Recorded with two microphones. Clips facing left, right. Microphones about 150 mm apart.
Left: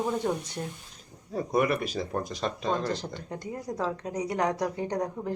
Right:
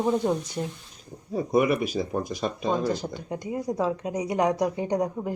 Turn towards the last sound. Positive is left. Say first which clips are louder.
# right 4 dB
turn(degrees=-15)  # may be behind; listen again after turning